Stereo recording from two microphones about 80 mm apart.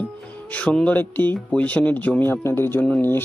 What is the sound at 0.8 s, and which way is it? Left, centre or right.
Speech, left.